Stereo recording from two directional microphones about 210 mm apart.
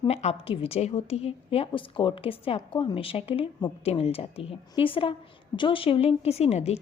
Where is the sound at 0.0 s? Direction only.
30° left (ahead or behind).